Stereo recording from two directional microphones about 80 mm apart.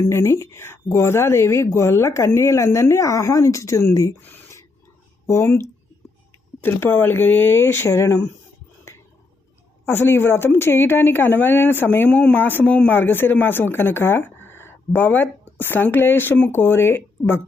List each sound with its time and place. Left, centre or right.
0.0 s speech: left
5.2 s speech: left
9.8 s speech: left